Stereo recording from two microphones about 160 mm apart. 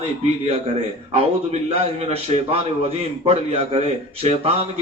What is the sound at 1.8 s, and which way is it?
A man's voice, 40° right (ahead or behind).